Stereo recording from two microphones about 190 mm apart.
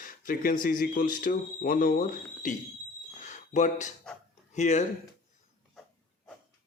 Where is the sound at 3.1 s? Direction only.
40° left (ahead or behind).